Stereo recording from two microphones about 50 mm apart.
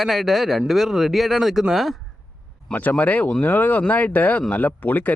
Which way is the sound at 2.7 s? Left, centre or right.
Left.